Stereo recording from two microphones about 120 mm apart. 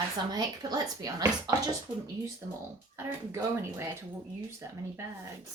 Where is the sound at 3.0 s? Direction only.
25° right (ahead or behind).